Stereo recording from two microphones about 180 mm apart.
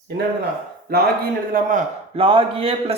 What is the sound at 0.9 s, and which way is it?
Speech, 60° right (ahead or behind).